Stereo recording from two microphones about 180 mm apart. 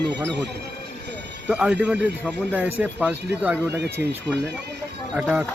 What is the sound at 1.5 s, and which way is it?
Speech, 5° right (ahead or behind).